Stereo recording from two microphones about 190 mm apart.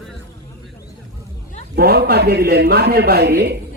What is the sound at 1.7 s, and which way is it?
A man's voice, 55° right (ahead or behind).